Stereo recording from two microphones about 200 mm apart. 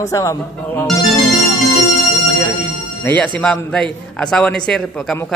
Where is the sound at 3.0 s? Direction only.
10° left (ahead or behind).